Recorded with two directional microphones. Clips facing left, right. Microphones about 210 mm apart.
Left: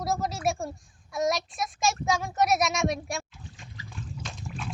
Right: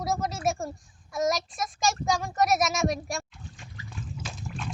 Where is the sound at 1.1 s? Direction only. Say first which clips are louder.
Even; centre (ahead or behind).